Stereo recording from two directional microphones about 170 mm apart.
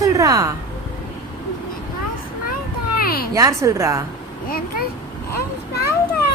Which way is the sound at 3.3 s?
20° right (ahead or behind).